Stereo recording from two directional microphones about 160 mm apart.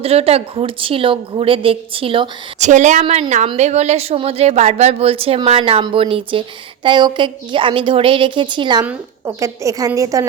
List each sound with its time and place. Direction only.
0.0 s a woman's voice: 40° right (ahead or behind)
2.6 s a woman's voice: 50° right (ahead or behind); by 8.8 s 30° right (ahead or behind)
8.8 s a woman's voice: 15° right (ahead or behind)